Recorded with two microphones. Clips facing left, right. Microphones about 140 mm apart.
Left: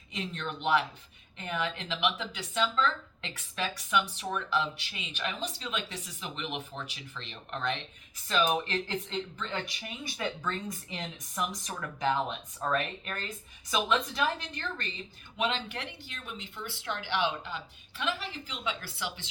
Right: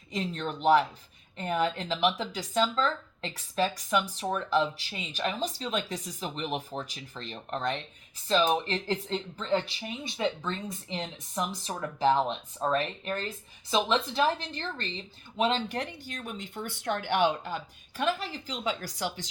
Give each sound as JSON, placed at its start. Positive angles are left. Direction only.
{"t": 0.1, "sound": "speech", "side_deg": -35}